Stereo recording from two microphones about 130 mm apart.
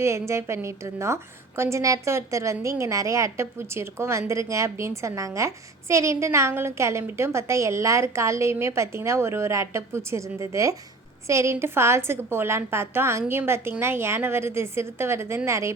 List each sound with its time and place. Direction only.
0.0 s a woman's voice: 20° right (ahead or behind)